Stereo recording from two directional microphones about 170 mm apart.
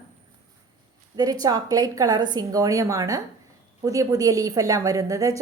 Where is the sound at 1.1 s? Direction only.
20° right (ahead or behind).